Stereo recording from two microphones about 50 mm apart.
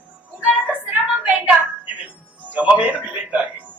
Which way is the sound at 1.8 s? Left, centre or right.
Right.